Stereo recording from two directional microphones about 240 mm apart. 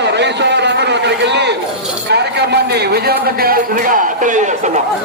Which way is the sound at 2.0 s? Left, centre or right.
Right.